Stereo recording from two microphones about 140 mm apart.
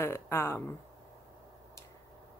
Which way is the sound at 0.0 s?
15° left (ahead or behind).